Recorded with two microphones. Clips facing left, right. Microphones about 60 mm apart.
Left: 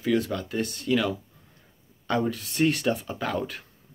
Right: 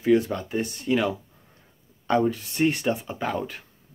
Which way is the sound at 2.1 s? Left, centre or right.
Centre.